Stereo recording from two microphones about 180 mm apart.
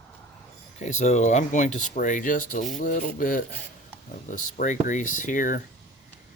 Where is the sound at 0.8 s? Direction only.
40° left (ahead or behind).